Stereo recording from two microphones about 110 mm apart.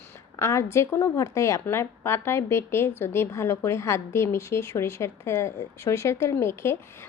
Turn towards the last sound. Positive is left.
turn(degrees=25)  # may be behind; listen again after turning